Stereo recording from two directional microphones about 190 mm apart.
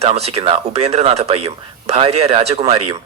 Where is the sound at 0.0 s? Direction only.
35° right (ahead or behind).